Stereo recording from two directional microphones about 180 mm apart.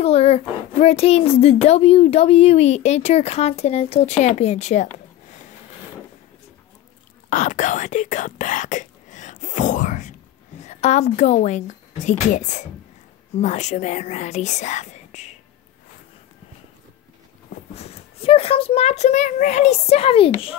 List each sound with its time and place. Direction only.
0.0 s speech: 35° left (ahead or behind)
7.2 s speech: 45° left (ahead or behind)
17.7 s speech: 35° left (ahead or behind)